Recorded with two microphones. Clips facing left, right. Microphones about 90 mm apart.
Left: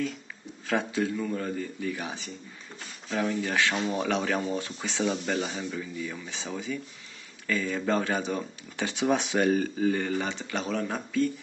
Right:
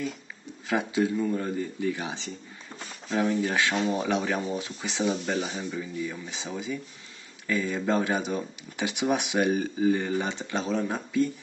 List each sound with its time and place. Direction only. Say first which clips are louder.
0.7 s a man's voice: right 2 dB; 15° right (ahead or behind)
4.2 s a man's voice: even; 5° right (ahead or behind)